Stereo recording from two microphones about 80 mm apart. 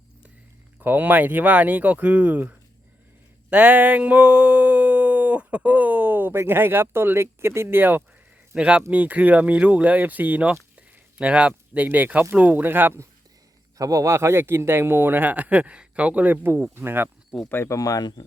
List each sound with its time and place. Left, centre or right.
0.8 s speech: right
3.5 s a sound: centre
8.5 s speech: centre
13.7 s speech: right
17.5 s speech: left
17.7 s speech: left